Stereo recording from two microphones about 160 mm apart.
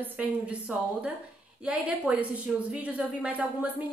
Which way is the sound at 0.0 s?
10° right (ahead or behind).